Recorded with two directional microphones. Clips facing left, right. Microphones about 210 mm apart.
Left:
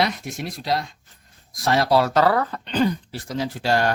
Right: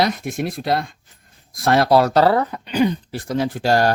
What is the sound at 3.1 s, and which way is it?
Speech, 55° right (ahead or behind).